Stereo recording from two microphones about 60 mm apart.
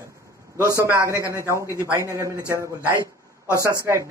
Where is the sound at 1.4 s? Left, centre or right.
Right.